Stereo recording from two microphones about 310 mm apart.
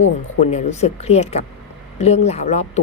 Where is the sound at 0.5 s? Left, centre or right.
Left.